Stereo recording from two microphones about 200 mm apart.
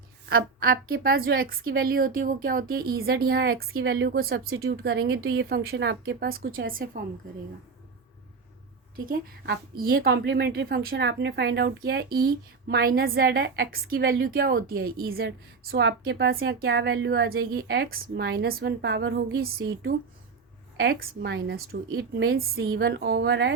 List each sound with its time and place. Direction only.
0.3 s a woman's voice: 50° right (ahead or behind)
9.0 s a woman's voice: 45° right (ahead or behind)